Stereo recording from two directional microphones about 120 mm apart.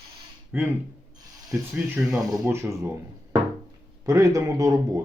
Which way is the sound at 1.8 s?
10° right (ahead or behind).